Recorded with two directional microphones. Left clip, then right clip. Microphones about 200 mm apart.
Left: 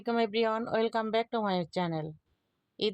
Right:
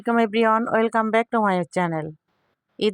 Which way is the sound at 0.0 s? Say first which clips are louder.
Right 9 dB; 30° right (ahead or behind).